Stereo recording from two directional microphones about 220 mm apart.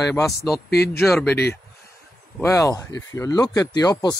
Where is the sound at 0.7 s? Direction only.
45° left (ahead or behind).